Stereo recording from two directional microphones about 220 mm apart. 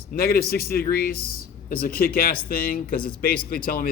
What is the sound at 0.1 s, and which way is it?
Speech, 45° left (ahead or behind).